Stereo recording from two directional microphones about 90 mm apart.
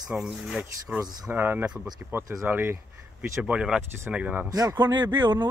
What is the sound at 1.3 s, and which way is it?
Speech, 25° right (ahead or behind).